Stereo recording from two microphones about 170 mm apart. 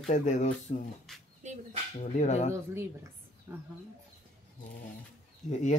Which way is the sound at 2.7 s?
15° right (ahead or behind).